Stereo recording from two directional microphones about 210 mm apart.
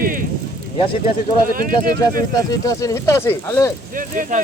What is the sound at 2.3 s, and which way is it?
Speech, 15° left (ahead or behind).